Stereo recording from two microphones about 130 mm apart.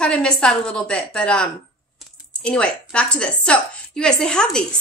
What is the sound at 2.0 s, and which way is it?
Typing, 5° left (ahead or behind).